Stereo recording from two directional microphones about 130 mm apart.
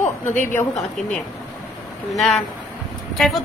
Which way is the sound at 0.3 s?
80° left.